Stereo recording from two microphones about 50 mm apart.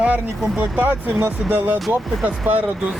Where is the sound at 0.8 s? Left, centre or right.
Right.